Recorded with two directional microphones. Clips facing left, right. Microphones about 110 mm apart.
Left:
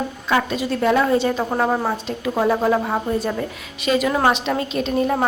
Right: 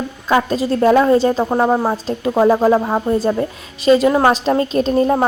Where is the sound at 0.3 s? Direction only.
40° right (ahead or behind).